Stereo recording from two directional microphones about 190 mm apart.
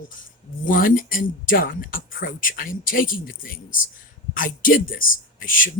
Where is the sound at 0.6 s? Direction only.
45° left (ahead or behind).